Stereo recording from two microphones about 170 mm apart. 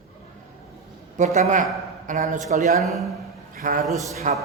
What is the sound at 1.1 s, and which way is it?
Speech, 40° right (ahead or behind).